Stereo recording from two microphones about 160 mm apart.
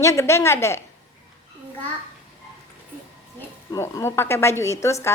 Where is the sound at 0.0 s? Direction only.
20° left (ahead or behind).